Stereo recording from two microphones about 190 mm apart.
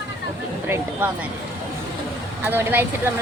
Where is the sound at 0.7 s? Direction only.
10° right (ahead or behind).